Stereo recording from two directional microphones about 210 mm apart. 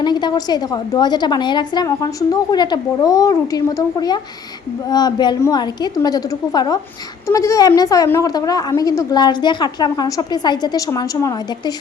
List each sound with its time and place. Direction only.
0.0 s a woman's voice: 20° left (ahead or behind)